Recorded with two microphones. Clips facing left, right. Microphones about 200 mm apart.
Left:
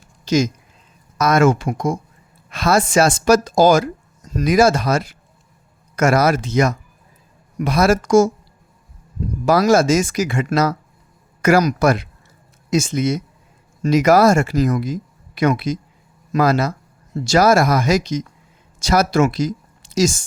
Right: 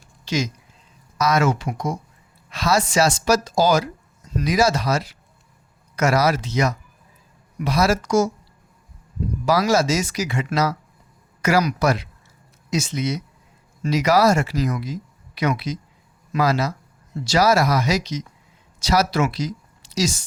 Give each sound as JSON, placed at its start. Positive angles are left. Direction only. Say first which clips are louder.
{"t": 0.3, "sound": "speech", "louder": "left 7 dB", "side_deg": 45}
{"t": 9.5, "sound": "a woman's voice", "louder": "left 5 dB", "side_deg": 50}